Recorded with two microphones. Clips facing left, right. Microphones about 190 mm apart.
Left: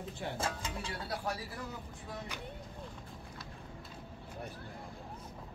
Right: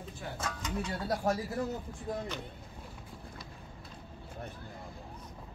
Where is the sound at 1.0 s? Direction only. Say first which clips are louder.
Right 8 dB; 45° right (ahead or behind).